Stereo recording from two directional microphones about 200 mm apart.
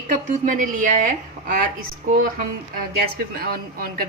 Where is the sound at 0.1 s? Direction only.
40° right (ahead or behind).